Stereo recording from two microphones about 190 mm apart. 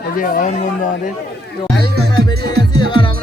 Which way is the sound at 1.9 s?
60° right (ahead or behind).